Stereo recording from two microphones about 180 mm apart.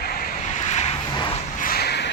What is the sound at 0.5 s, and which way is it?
Vehicle, 40° left (ahead or behind).